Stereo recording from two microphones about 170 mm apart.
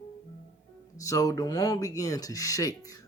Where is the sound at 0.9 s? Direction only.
20° left (ahead or behind).